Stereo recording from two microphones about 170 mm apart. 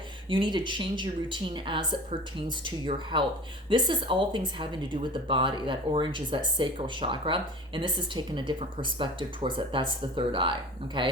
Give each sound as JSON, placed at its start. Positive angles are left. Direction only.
{"t": 0.3, "sound": "speech", "side_deg": -25}